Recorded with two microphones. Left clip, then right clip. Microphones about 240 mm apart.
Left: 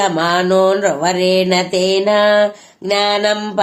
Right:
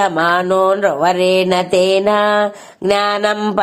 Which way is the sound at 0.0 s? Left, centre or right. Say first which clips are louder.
Right 1 dB; right.